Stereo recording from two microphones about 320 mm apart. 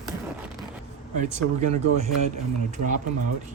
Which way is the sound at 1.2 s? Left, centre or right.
Right.